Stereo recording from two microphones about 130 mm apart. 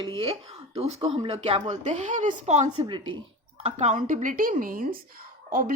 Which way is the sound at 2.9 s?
40° right (ahead or behind).